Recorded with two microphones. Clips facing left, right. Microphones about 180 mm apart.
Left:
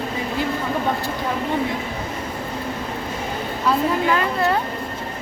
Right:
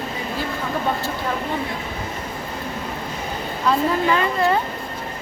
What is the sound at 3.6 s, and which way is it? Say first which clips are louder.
Speech: even; centre (ahead or behind).